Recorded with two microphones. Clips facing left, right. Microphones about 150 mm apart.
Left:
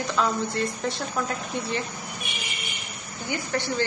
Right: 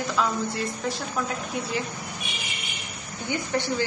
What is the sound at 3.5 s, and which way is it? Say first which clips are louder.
Speech: even; 15° right (ahead or behind).